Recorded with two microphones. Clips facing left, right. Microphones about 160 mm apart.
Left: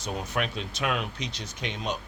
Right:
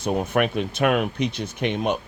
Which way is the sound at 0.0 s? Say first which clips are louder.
Right 9 dB; 55° right (ahead or behind).